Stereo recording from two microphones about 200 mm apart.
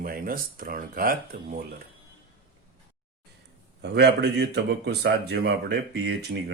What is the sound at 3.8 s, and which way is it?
Speech, 60° right (ahead or behind).